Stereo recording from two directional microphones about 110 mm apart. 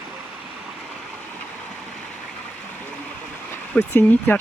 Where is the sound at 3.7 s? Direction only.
15° left (ahead or behind).